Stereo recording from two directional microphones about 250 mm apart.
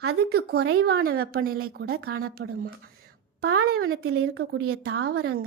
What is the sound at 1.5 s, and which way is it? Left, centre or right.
Speech, right.